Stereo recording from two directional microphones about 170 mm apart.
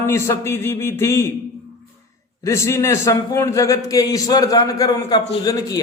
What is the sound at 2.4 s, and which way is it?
A man's voice, 15° left (ahead or behind).